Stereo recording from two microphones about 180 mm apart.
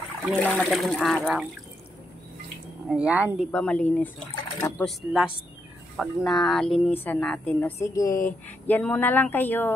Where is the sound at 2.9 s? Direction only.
5° right (ahead or behind).